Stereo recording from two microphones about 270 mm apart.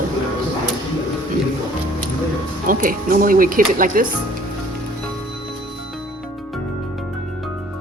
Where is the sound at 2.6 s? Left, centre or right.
Right.